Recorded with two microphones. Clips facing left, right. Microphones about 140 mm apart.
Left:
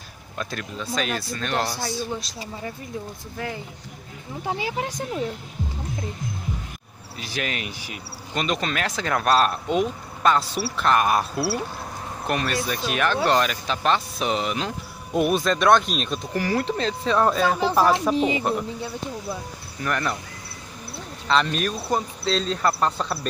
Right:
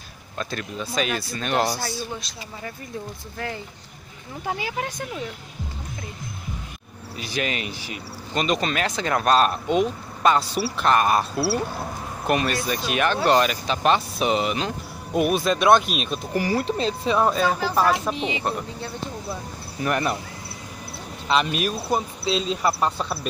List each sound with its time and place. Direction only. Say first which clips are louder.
0.4 s speech: right 1 dB; centre (ahead or behind)
4.5 s speech: left 1 dB; 25° left (ahead or behind)
4.8 s speech: left 2 dB; 15° left (ahead or behind)
7.2 s speech: right 2 dB; centre (ahead or behind)
17.3 s speech: left 1 dB; centre (ahead or behind)
18.1 s speech: left 6 dB; 40° left (ahead or behind)
18.4 s speech: left 3 dB; 5° left (ahead or behind)
19.8 s speech: right 3 dB; 20° right (ahead or behind)
21.3 s speech: even; 10° right (ahead or behind)